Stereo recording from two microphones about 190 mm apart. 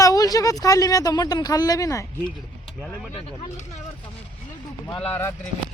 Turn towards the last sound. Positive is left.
turn(degrees=10)  # may be behind; listen again after turning